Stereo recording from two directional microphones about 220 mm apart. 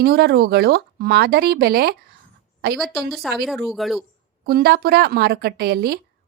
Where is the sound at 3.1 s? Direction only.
Centre (ahead or behind).